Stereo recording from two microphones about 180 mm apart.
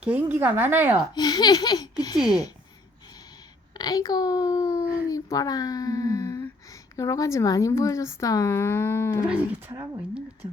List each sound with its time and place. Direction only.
0.0 s speech: 10° right (ahead or behind)
1.1 s a child's voice: 20° left (ahead or behind)
3.8 s a child's voice: 20° left (ahead or behind)
9.2 s speech: 5° right (ahead or behind)